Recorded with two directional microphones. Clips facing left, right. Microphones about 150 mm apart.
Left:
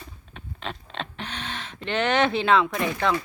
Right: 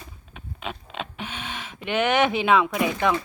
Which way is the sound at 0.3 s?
10° right (ahead or behind).